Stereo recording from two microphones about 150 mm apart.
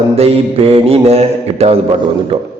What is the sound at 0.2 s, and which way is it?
Mantra, 40° right (ahead or behind).